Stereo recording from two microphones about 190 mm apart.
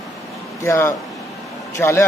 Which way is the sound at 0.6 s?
15° left (ahead or behind).